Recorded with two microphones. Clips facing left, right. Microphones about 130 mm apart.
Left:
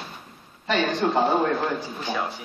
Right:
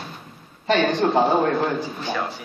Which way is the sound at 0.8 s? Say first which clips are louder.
Right 2 dB; centre (ahead or behind).